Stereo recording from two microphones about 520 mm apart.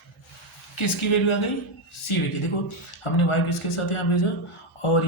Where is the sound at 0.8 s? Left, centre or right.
Left.